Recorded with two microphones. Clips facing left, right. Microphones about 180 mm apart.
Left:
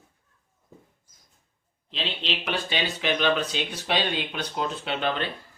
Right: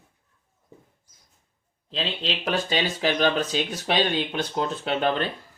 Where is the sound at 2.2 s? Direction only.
40° right (ahead or behind).